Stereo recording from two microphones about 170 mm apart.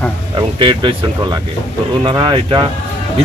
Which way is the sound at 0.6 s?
30° right (ahead or behind).